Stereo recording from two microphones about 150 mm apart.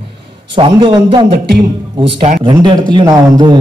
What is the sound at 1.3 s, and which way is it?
Speech, 90° right.